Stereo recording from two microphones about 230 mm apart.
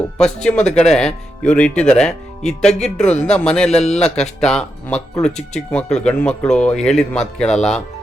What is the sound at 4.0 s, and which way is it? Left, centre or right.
Speech, centre.